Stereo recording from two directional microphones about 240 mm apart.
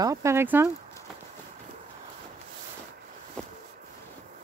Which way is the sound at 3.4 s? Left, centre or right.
Centre.